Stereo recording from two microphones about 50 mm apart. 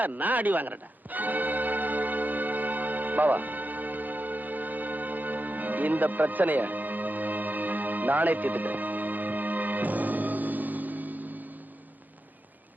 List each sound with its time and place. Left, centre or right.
0.0 s music: right